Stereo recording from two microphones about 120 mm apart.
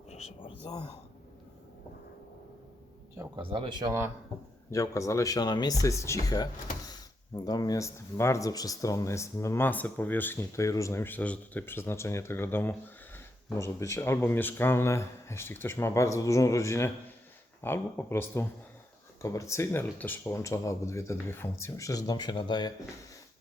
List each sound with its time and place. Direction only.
0.6 s speech: 35° left (ahead or behind)
3.3 s speech: 45° right (ahead or behind)
4.7 s speech: 25° left (ahead or behind)